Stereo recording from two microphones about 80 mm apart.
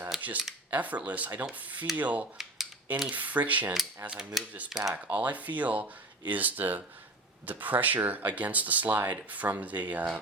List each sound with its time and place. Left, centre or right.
0.2 s speech: centre
2.0 s a sound: centre
3.1 s speech: centre
4.0 s a sound: centre
4.7 s speech: centre
5.1 s speech: centre